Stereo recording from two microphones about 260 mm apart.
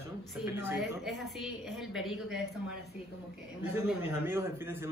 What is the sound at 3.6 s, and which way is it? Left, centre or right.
A man's voice, centre.